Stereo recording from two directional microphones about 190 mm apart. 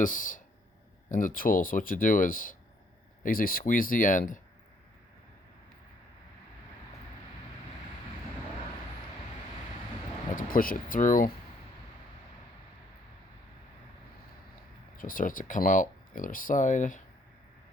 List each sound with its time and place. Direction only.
0.0 s speech: 45° left (ahead or behind)
10.3 s speech: 45° left (ahead or behind)
14.9 s speech: 45° left (ahead or behind)